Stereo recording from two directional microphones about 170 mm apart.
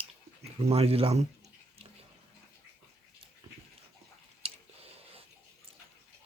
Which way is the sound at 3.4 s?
25° right (ahead or behind).